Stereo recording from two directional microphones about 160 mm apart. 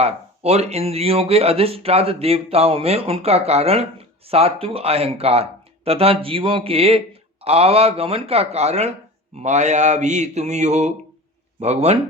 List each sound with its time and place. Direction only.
0.0 s a man's voice: 40° right (ahead or behind)